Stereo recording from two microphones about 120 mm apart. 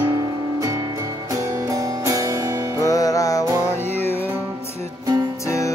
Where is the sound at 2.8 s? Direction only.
30° left (ahead or behind).